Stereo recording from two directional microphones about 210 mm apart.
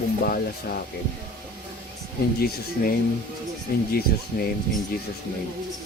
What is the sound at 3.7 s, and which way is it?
Speech, 45° left (ahead or behind).